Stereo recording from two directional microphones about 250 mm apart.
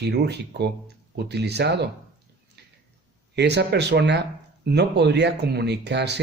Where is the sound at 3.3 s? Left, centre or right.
Right.